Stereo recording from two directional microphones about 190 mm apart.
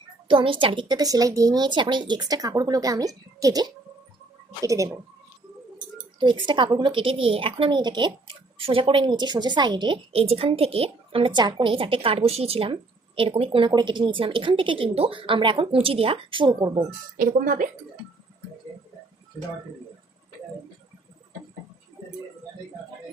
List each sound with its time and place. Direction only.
0.3 s a woman's voice: 25° right (ahead or behind)
6.1 s a woman's voice: 25° right (ahead or behind)
17.2 s speech: 45° right (ahead or behind)